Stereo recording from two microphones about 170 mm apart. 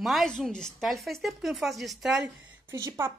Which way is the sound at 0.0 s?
Centre (ahead or behind).